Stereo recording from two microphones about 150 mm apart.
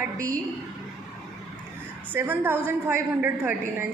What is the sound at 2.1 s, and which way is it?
A woman's voice, 15° right (ahead or behind).